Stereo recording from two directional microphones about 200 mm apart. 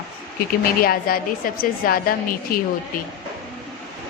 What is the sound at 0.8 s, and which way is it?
Speech, 45° left (ahead or behind).